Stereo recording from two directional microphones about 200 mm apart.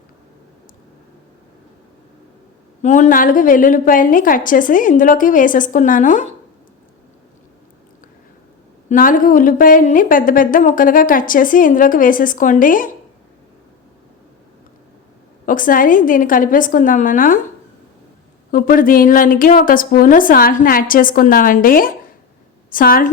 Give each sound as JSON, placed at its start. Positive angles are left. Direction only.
{"t": 2.8, "sound": "a woman's voice", "side_deg": 35}
{"t": 8.9, "sound": "a woman's voice", "side_deg": 45}
{"t": 15.4, "sound": "a woman's voice", "side_deg": 45}
{"t": 18.5, "sound": "a woman's voice", "side_deg": 45}